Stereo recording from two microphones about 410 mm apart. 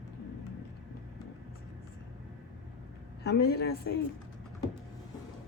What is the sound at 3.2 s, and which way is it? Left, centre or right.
Speech, left.